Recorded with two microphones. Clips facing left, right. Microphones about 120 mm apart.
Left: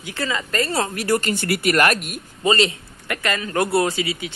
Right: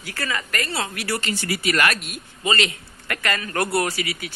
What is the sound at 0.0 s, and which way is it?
Speech, 20° left (ahead or behind).